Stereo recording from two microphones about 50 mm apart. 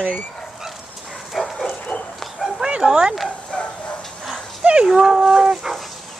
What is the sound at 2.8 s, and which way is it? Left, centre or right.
Speech, centre.